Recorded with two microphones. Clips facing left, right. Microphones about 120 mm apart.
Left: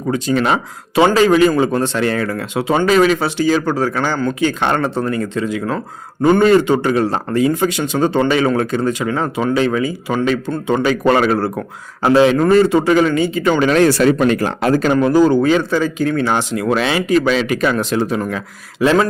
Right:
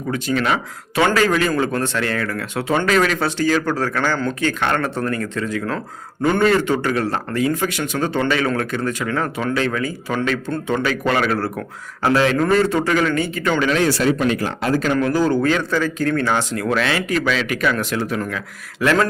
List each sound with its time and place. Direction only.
0.1 s a man's voice: 30° left (ahead or behind)
11.3 s a man's voice: 20° left (ahead or behind)
13.6 s speech: 45° left (ahead or behind)
14.9 s speech: 20° left (ahead or behind)